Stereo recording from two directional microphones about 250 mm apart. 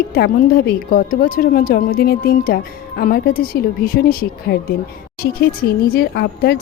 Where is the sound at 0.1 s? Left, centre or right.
Left.